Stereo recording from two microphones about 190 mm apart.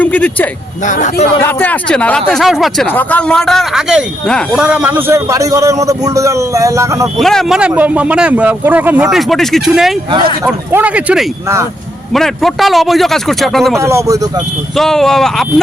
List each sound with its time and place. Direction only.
0.0 s speech: 10° left (ahead or behind)
0.9 s a man's voice: 45° left (ahead or behind)
1.4 s speech: 10° left (ahead or behind); by 7.1 s 15° right (ahead or behind)
7.2 s speech: centre (ahead or behind)
13.7 s speech: 15° right (ahead or behind)
14.8 s speech: centre (ahead or behind)